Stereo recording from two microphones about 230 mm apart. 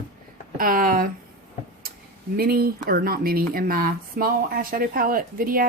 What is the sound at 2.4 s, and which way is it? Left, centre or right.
Speech, right.